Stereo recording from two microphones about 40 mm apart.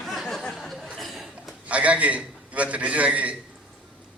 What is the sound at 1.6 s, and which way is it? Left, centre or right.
A man's voice, right.